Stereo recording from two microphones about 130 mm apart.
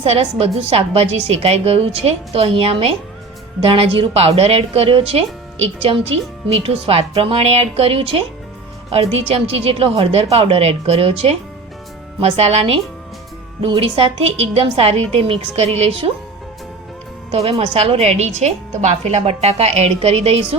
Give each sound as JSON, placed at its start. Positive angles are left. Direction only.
{"t": 0.0, "sound": "a woman's voice", "side_deg": -50}
{"t": 17.3, "sound": "a woman's voice", "side_deg": -50}